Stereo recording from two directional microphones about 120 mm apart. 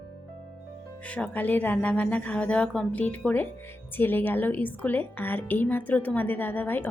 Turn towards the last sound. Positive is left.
turn(degrees=15)  # may be behind; listen again after turning